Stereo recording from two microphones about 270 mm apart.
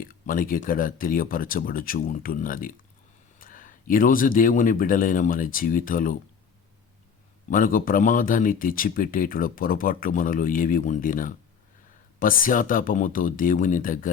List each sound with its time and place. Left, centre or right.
0.0 s speech: left
7.5 s speech: left